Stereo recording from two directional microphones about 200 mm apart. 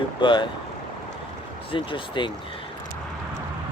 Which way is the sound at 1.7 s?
25° left (ahead or behind).